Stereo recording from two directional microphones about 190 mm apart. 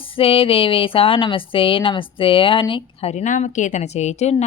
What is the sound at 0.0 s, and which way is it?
A woman's voice, 30° left (ahead or behind).